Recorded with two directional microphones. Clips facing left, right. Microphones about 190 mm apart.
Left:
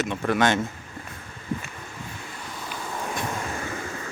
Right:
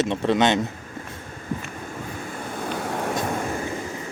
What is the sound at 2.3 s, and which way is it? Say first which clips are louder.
Vehicle: right 10 dB; 55° right (ahead or behind).